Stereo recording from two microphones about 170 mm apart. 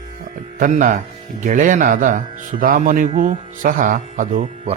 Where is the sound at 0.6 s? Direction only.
50° right (ahead or behind).